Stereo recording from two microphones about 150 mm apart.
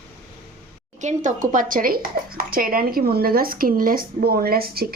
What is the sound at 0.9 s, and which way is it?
A woman's voice, 55° right (ahead or behind).